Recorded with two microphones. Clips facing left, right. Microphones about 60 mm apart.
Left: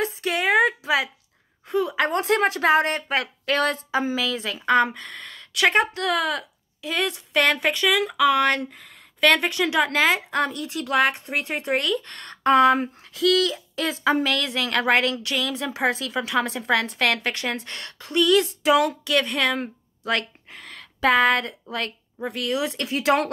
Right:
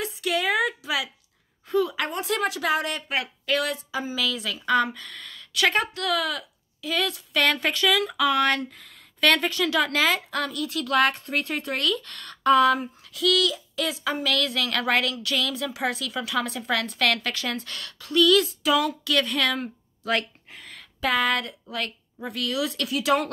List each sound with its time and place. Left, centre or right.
0.0 s a sound: left
1.7 s a woman's voice: left
2.0 s speech: left
2.4 s speech: left
7.6 s a woman's voice: centre; by 19.7 s left
20.6 s a woman's voice: left